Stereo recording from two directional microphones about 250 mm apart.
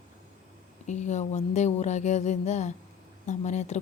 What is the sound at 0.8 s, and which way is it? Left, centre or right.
A woman's voice, left.